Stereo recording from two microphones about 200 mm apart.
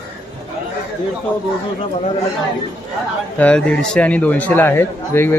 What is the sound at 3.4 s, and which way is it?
Speech, 5° left (ahead or behind).